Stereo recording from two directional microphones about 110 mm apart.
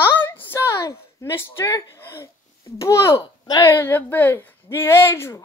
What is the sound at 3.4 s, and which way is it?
Speech, 40° left (ahead or behind).